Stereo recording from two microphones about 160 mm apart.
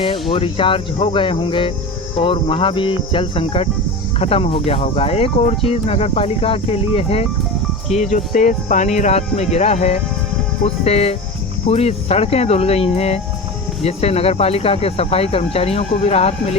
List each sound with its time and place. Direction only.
0.0 s speech: 35° left (ahead or behind)